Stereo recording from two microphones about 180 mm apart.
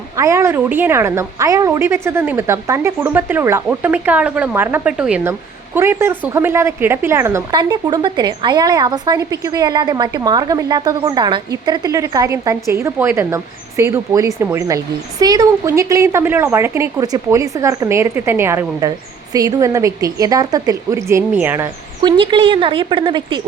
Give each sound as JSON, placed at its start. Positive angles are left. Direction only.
{"t": 0.2, "sound": "a woman's voice", "side_deg": -15}
{"t": 22.0, "sound": "speech", "side_deg": -25}